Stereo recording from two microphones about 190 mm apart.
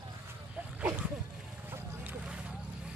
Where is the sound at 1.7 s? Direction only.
10° right (ahead or behind).